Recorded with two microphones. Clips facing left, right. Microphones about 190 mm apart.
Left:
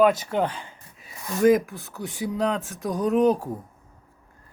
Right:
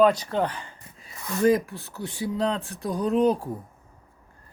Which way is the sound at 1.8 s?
Centre (ahead or behind).